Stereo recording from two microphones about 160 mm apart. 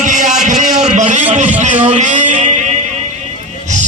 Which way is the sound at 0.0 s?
50° right (ahead or behind).